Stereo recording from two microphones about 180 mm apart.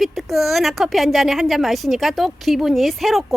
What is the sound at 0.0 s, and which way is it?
A woman's voice, centre (ahead or behind).